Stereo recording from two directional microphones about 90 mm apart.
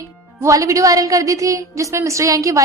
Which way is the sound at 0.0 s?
35° right (ahead or behind).